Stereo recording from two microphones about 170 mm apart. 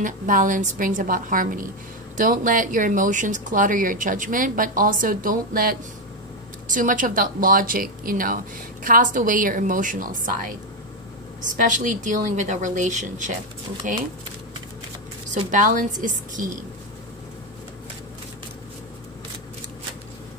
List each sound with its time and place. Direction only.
0.0 s a woman's voice: 50° right (ahead or behind)
11.6 s speech: 50° right (ahead or behind)
15.2 s speech: 50° right (ahead or behind)